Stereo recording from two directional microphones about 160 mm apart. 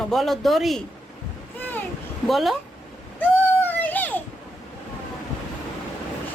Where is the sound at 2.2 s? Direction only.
Centre (ahead or behind).